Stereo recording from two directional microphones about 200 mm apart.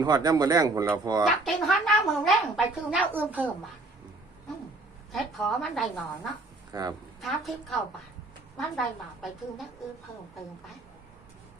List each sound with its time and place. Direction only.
0.0 s speech: 20° right (ahead or behind)
1.2 s a woman's voice: centre (ahead or behind)
5.1 s a woman's voice: centre (ahead or behind)
6.7 s speech: 20° right (ahead or behind)
7.2 s a woman's voice: centre (ahead or behind)